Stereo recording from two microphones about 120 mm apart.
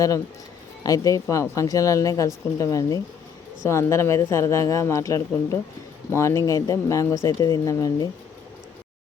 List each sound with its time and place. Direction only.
0.9 s speech: 30° left (ahead or behind)